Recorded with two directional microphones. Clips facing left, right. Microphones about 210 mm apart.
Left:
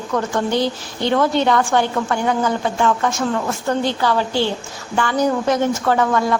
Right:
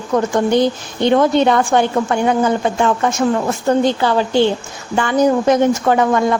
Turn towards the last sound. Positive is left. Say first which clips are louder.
# right 3 dB
turn(degrees=-20)  # may be behind; listen again after turning